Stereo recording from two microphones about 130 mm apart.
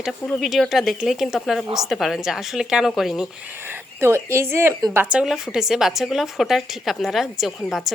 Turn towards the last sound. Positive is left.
turn(degrees=0)  # may be behind; listen again after turning